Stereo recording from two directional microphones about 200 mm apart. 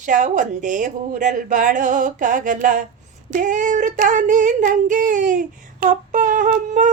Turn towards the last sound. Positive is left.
turn(degrees=-40)  # may be behind; listen again after turning